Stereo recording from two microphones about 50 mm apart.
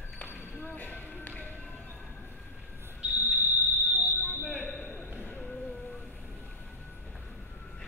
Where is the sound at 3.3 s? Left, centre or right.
Right.